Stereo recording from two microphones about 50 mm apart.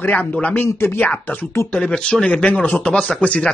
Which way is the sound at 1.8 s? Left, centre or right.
Centre.